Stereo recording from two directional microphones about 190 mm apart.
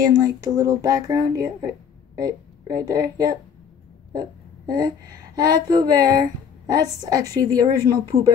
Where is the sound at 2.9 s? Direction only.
20° right (ahead or behind).